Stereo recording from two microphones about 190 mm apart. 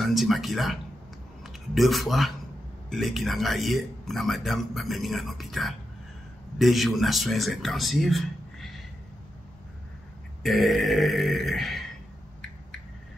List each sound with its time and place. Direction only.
0.0 s a man's voice: centre (ahead or behind)
10.4 s a man's voice: centre (ahead or behind)